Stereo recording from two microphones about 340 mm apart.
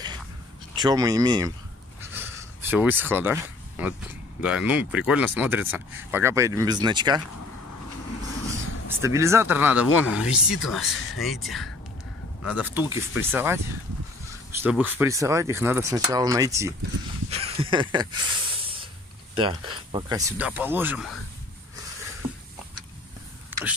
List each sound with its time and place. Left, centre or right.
0.7 s speech: centre
2.0 s a sound: centre
4.4 s speech: centre
9.0 s speech: centre
14.6 s speech: centre
17.3 s a sound: centre
19.3 s speech: centre
23.5 s vehicle: centre